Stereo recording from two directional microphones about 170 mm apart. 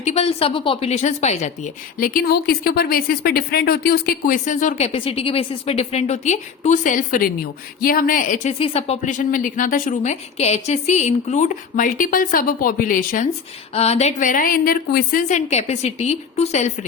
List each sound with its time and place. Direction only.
0.0 s a woman's voice: 40° left (ahead or behind)
8.5 s a woman's voice: 35° left (ahead or behind); by 13.2 s 55° left (ahead or behind)
13.7 s a woman's voice: 40° left (ahead or behind); by 15.2 s 65° left (ahead or behind)
15.3 s a woman's voice: 45° left (ahead or behind)